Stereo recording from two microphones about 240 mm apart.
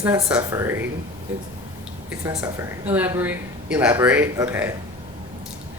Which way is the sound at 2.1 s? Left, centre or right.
Centre.